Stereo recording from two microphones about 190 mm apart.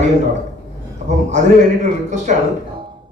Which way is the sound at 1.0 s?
35° right (ahead or behind).